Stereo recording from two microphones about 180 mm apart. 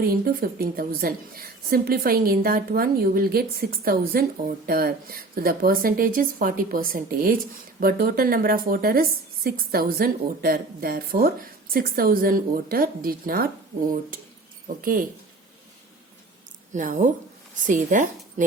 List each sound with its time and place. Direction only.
0.0 s a woman's voice: 55° right (ahead or behind)
14.8 s a woman's voice: 50° right (ahead or behind)
16.7 s a woman's voice: 45° right (ahead or behind)